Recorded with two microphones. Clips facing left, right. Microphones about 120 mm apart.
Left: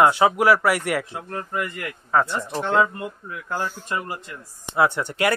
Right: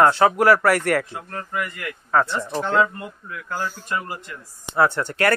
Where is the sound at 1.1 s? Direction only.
25° left (ahead or behind).